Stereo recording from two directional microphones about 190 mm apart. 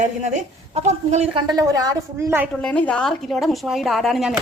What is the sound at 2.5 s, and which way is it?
A woman's voice, 5° left (ahead or behind).